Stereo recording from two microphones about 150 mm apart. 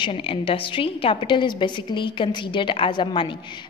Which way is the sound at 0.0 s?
35° left (ahead or behind).